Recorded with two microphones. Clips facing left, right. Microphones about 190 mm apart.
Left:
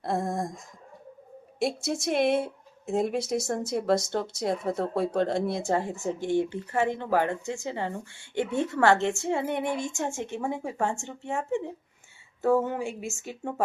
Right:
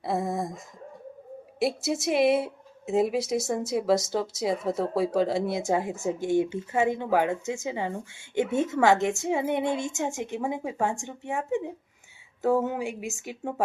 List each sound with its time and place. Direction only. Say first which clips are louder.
0.0 s a sound: right 1 dB; centre (ahead or behind)
1.5 s a woman's voice: right 2 dB; centre (ahead or behind)
5.6 s speech: right 1 dB; 15° right (ahead or behind)